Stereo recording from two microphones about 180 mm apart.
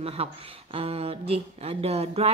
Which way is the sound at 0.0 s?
35° right (ahead or behind).